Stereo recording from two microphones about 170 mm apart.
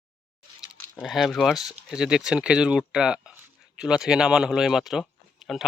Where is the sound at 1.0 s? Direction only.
Centre (ahead or behind).